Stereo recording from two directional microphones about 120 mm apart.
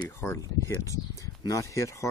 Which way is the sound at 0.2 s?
25° left (ahead or behind).